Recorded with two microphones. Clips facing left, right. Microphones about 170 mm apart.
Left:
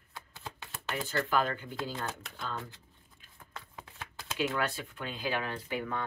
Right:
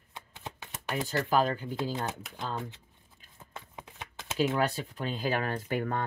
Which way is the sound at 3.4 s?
20° right (ahead or behind).